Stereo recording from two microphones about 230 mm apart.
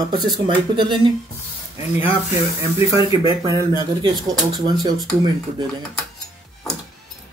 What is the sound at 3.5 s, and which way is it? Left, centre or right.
Speech, centre.